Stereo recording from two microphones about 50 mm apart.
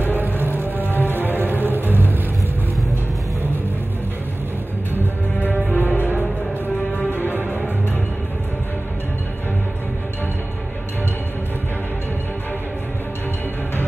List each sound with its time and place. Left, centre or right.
0.9 s music: right
5.7 s music: left